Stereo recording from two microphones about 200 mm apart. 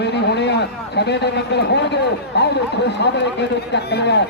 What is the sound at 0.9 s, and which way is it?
Speech, 60° left (ahead or behind).